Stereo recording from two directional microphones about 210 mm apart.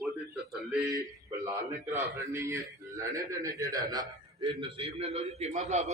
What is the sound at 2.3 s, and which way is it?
A man's voice, 15° right (ahead or behind).